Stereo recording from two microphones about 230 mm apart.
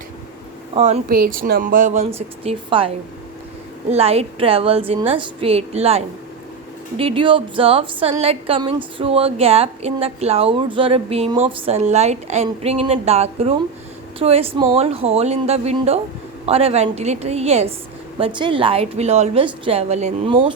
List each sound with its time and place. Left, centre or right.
0.7 s a woman's voice: right
3.9 s a woman's voice: right